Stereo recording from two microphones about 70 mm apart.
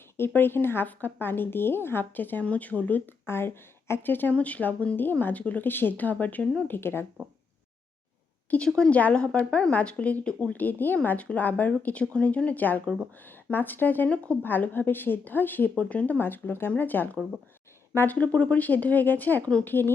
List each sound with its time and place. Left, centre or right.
0.2 s a woman's voice: left
8.4 s a woman's voice: centre; by 19.9 s left